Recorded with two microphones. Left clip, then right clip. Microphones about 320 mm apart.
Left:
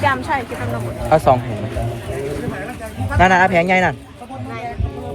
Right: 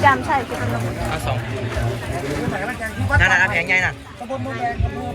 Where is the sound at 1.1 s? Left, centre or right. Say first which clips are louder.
Left 16 dB; left.